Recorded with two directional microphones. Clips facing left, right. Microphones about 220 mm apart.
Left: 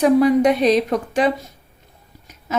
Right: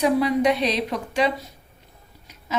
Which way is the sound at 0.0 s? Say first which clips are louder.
Left 6 dB; 50° left (ahead or behind).